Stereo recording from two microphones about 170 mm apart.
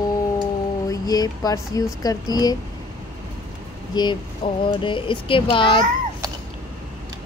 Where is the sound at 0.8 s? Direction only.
20° left (ahead or behind).